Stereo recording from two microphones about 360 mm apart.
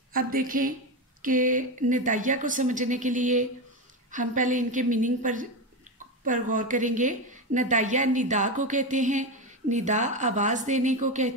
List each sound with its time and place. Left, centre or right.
0.1 s a woman's voice: right